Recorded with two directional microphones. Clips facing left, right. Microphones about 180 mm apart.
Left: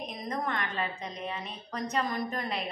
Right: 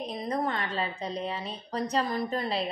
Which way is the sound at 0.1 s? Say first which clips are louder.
Right 4 dB; 30° right (ahead or behind).